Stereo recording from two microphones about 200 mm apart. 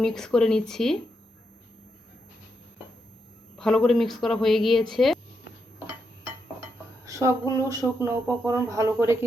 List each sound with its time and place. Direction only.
0.0 s speech: centre (ahead or behind)
3.6 s speech: centre (ahead or behind)
7.0 s speech: 15° right (ahead or behind)